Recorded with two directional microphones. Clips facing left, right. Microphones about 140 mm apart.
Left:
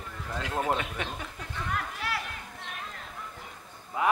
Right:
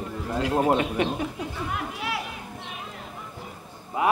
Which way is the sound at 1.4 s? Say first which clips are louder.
Right 4 dB; 10° right (ahead or behind).